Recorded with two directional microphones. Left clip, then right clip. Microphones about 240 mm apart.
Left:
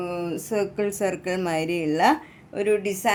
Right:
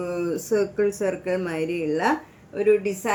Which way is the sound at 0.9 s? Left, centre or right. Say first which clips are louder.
Right 1 dB; left.